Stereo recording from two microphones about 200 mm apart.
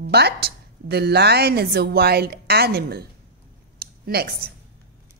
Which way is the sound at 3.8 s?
50° right (ahead or behind).